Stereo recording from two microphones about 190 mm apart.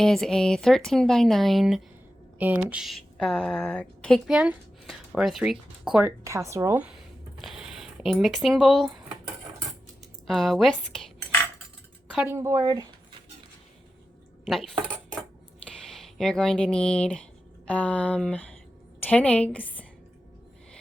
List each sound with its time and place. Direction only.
0.0 s a woman's voice: 5° left (ahead or behind)
7.3 s a sound: centre (ahead or behind)
10.2 s a woman's voice: centre (ahead or behind)
12.1 s speech: 10° right (ahead or behind)
14.4 s a woman's voice: centre (ahead or behind)